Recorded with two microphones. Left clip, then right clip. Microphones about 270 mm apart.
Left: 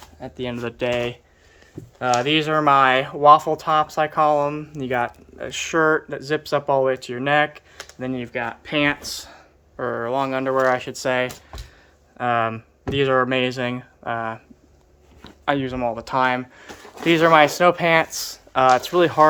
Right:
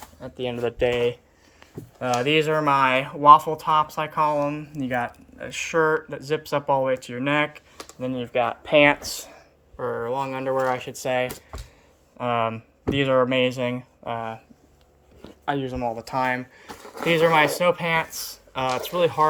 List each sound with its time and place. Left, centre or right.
0.5 s speech: left
0.9 s speech: centre
8.3 s speech: left
8.7 s speech: centre
9.7 s speech: centre